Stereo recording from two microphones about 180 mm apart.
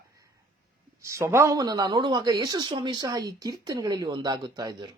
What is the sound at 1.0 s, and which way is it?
A woman's voice, 15° right (ahead or behind).